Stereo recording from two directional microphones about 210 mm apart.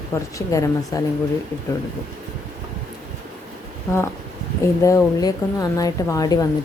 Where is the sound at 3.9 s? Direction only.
10° left (ahead or behind).